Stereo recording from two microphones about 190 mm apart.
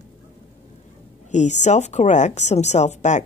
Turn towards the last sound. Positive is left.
turn(degrees=40)  # may be behind; listen again after turning